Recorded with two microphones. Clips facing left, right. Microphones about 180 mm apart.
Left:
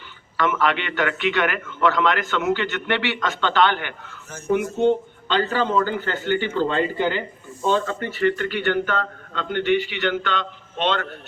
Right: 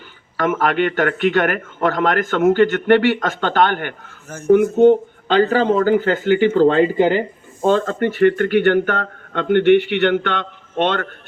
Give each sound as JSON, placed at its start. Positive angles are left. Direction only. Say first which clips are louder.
{"t": 0.3, "sound": "a man's voice", "louder": "right 4 dB", "side_deg": -45}